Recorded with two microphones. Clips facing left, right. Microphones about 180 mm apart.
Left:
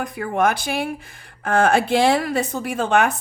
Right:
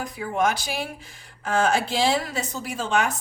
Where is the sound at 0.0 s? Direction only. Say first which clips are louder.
Left 4 dB; 55° left (ahead or behind).